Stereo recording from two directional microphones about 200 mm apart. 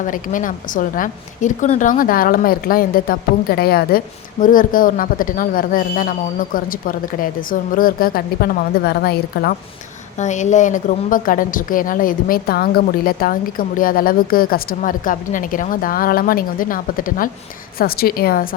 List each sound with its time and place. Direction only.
0.0 s a woman's voice: 40° left (ahead or behind)
10.2 s a woman's voice: 35° left (ahead or behind)